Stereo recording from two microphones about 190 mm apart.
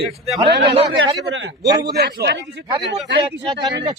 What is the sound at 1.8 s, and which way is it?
Speech, 60° right (ahead or behind).